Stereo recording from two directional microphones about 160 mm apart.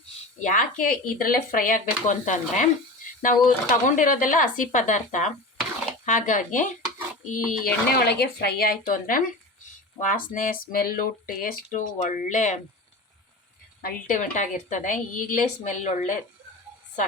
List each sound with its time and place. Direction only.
0.4 s a woman's voice: 55° left (ahead or behind)
13.8 s a woman's voice: 55° left (ahead or behind)